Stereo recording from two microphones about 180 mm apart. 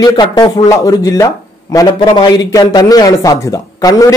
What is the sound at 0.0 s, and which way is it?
A man's voice, 25° left (ahead or behind).